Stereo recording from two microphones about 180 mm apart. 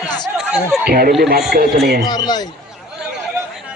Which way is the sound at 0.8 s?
60° right (ahead or behind).